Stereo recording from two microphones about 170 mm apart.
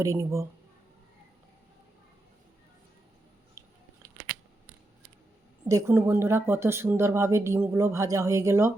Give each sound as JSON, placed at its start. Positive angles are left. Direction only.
{"t": 0.0, "sound": "speech", "side_deg": -15}
{"t": 5.6, "sound": "speech", "side_deg": -15}